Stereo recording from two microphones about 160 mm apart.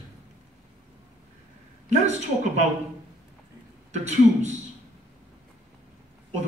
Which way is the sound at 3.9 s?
45° right (ahead or behind).